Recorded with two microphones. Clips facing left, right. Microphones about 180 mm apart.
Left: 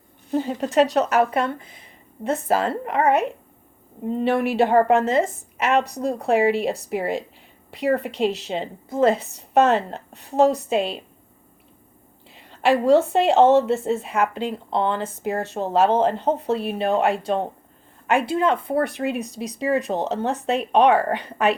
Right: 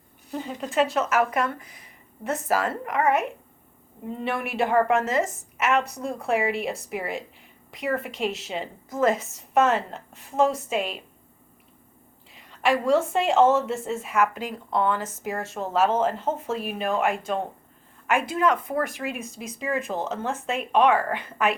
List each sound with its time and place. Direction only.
0.3 s a woman's voice: 35° left (ahead or behind)
12.3 s a woman's voice: 30° left (ahead or behind)